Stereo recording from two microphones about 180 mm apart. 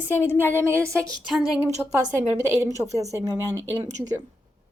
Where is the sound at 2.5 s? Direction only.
15° right (ahead or behind).